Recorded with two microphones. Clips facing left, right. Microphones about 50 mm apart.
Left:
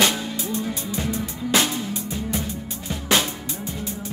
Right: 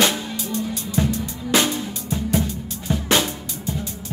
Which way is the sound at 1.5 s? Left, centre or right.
Centre.